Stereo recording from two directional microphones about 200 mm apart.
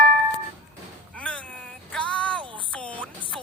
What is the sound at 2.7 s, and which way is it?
Music, 5° left (ahead or behind).